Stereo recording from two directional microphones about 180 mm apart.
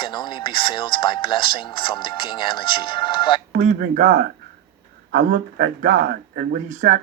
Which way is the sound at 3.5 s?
45° right (ahead or behind).